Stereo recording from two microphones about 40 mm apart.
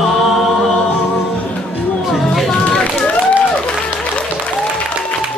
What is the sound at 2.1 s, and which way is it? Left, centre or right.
Music, centre.